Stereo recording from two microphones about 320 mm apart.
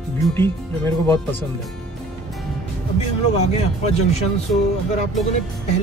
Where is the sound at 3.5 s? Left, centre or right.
Centre.